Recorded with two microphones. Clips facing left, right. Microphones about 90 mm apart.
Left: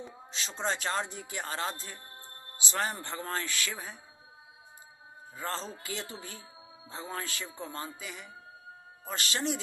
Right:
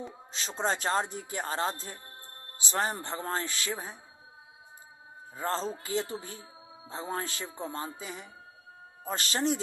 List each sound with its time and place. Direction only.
0.3 s speech: 40° right (ahead or behind)
5.4 s speech: 35° right (ahead or behind)